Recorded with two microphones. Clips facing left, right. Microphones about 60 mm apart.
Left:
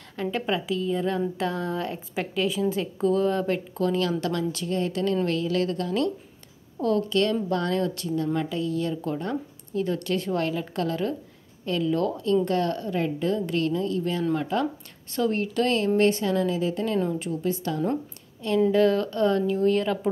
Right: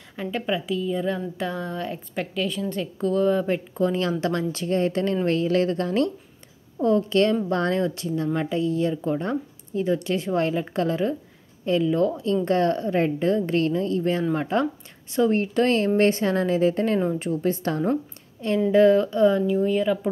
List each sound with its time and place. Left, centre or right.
0.1 s a woman's voice: centre
3.4 s a woman's voice: centre
15.0 s speech: centre
15.3 s speech: right
18.7 s speech: right; by 20.1 s centre